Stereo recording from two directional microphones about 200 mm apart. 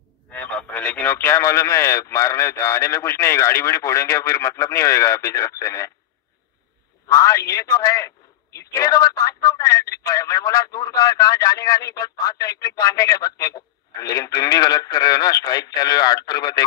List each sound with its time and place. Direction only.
0.3 s speech: 5° left (ahead or behind)
7.1 s speech: 15° left (ahead or behind)